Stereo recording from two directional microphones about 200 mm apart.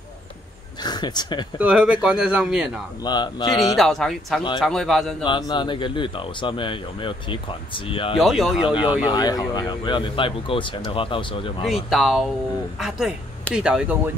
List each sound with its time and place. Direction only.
0.8 s speech: 20° left (ahead or behind)
1.6 s speech: 5° right (ahead or behind)
3.0 s speech: 20° left (ahead or behind)
3.7 s speech: centre (ahead or behind)
5.2 s speech: 25° left (ahead or behind)
8.2 s speech: centre (ahead or behind)
8.5 s speech: 25° left (ahead or behind)
11.9 s speech: centre (ahead or behind)